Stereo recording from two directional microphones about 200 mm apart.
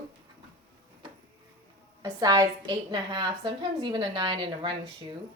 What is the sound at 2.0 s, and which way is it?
A woman's voice, 15° right (ahead or behind).